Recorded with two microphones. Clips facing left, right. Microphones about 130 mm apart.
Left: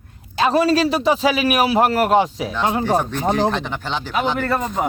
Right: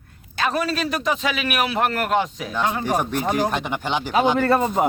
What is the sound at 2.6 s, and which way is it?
Speech, 25° left (ahead or behind).